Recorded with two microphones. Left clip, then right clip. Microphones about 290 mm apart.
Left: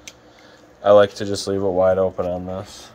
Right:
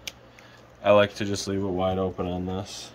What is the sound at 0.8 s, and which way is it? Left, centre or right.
Speech, centre.